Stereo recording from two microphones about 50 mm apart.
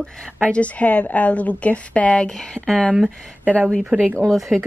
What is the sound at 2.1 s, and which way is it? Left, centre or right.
Speech, centre.